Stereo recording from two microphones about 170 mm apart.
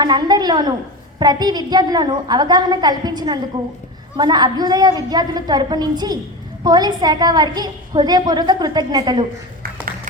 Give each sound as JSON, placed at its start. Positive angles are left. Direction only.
{"t": 0.0, "sound": "a woman's voice", "side_deg": -25}